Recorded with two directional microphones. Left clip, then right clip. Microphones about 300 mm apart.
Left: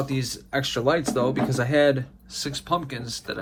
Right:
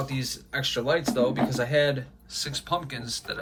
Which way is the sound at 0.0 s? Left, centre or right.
Centre.